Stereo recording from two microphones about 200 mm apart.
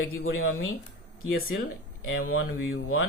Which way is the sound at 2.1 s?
90° left.